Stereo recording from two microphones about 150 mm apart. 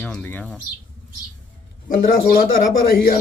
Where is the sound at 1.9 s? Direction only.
75° left (ahead or behind).